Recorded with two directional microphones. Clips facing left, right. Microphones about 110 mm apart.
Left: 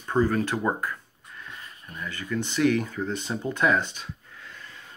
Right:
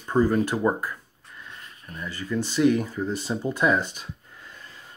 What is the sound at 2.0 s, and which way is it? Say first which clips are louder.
Speech: right 2 dB; 15° right (ahead or behind).